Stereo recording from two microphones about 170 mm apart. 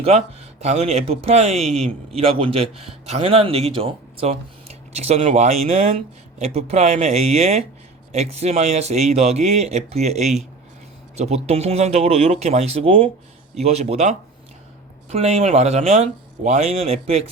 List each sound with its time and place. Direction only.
0.6 s a man's voice: 40° right (ahead or behind)
11.4 s a man's voice: 40° right (ahead or behind)